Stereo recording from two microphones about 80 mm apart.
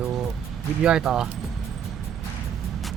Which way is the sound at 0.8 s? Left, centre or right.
Centre.